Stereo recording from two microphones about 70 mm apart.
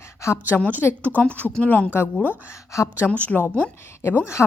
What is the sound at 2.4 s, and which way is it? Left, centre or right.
Speech, left.